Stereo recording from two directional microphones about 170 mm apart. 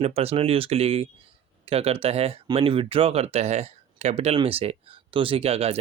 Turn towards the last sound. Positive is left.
turn(degrees=-35)  # may be behind; listen again after turning